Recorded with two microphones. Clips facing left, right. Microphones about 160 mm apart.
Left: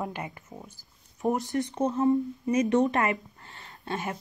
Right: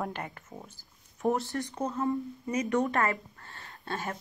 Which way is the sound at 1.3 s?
20° left (ahead or behind).